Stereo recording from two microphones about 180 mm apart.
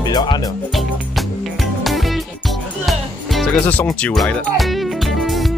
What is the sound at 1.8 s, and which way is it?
Music, centre (ahead or behind).